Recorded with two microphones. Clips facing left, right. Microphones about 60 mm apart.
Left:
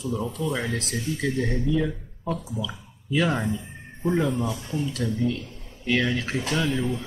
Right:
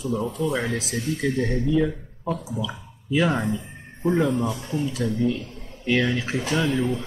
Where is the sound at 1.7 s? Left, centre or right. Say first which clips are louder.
Right 3 dB; centre.